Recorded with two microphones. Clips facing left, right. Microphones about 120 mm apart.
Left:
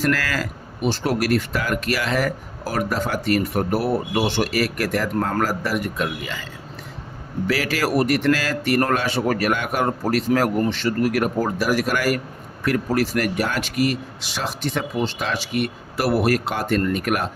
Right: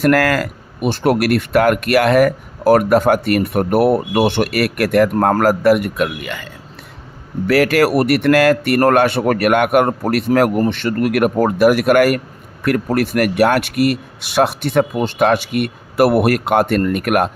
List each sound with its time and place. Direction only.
0.0 s speech: 55° right (ahead or behind)